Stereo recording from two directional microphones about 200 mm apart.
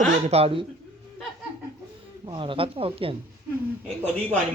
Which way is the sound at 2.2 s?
25° right (ahead or behind).